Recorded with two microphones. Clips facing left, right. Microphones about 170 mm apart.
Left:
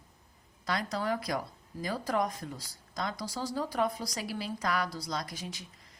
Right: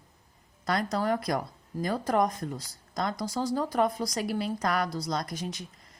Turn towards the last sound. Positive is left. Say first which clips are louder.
# right 5 dB
turn(degrees=-45)  # may be behind; listen again after turning